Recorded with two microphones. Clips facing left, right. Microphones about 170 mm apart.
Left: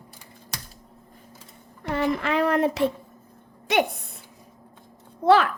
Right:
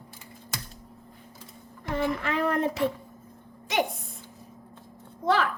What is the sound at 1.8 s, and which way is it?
Speech, 75° left (ahead or behind).